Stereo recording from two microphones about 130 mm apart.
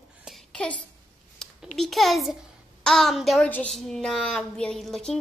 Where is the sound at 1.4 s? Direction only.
5° left (ahead or behind).